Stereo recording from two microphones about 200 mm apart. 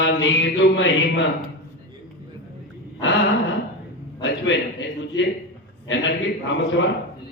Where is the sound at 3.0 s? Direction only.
65° left (ahead or behind).